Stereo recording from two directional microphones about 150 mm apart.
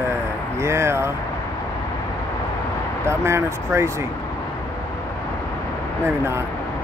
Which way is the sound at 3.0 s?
15° right (ahead or behind).